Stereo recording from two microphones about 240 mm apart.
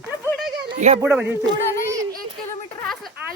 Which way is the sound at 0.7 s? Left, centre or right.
Right.